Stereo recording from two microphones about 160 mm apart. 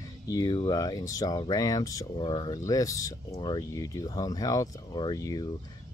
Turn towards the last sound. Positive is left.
turn(degrees=25)  # may be behind; listen again after turning